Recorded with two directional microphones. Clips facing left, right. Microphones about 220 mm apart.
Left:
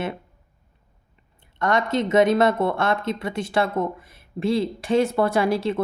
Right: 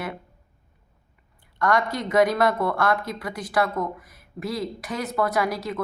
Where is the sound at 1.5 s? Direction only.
25° left (ahead or behind).